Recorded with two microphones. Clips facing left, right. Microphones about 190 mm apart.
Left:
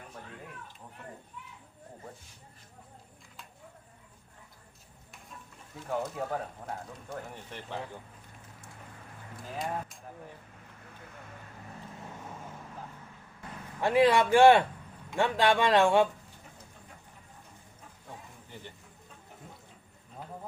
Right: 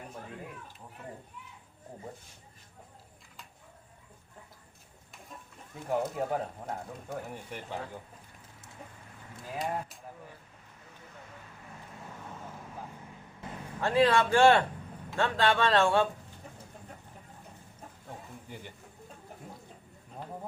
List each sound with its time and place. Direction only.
5.9 s speech: 15° right (ahead or behind)
13.8 s a man's voice: 15° left (ahead or behind)